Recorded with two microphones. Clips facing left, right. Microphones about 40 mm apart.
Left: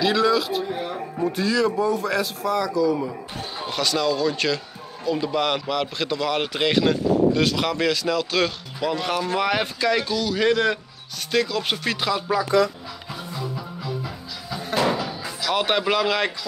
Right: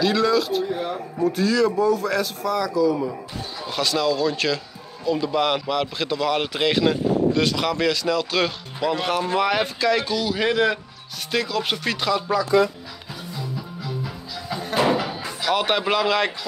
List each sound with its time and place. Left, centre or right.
0.0 s speech: centre
14.5 s music: centre
15.5 s speech: centre